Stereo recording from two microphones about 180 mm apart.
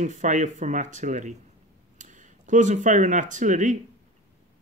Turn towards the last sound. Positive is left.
turn(degrees=-45)  # may be behind; listen again after turning